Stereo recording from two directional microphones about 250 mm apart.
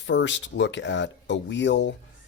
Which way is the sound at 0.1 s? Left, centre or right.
Left.